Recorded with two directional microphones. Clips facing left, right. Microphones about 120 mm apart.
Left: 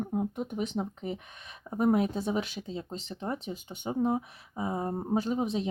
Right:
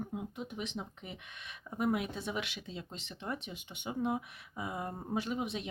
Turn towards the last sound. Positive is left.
turn(degrees=35)  # may be behind; listen again after turning